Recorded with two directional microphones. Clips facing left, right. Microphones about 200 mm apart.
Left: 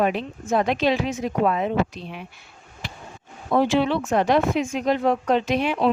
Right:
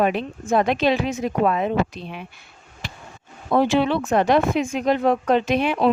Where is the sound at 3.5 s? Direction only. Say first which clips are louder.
Right 1 dB; 55° right (ahead or behind).